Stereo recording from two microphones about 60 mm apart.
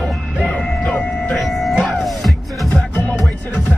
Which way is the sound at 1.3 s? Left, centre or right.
Centre.